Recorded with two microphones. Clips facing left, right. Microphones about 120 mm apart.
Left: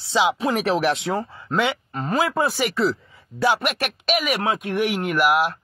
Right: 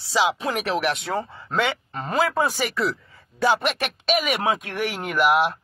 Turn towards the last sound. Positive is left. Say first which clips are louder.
# even
turn(degrees=0)  # may be behind; listen again after turning